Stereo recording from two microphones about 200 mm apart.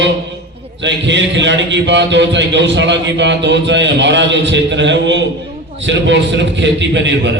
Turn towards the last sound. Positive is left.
turn(degrees=-65)  # may be behind; listen again after turning